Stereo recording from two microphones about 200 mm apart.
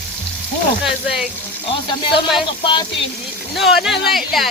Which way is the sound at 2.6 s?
25° left (ahead or behind).